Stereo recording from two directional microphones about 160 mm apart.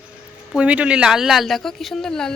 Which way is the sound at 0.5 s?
10° right (ahead or behind).